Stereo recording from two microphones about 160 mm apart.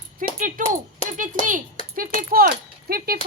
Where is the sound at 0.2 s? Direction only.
55° right (ahead or behind).